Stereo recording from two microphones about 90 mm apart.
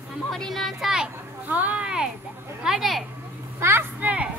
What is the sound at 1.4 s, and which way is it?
Speech, 15° right (ahead or behind).